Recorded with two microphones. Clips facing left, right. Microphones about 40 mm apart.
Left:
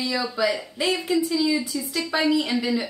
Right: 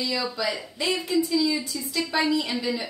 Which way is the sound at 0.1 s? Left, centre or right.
Centre.